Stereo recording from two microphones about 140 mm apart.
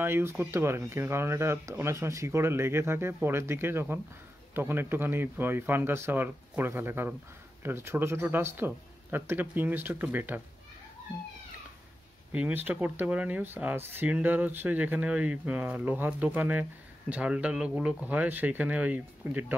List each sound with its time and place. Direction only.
0.0 s speech: 15° right (ahead or behind)
12.3 s speech: 10° right (ahead or behind)